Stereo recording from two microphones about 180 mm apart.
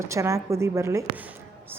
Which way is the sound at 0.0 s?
15° right (ahead or behind).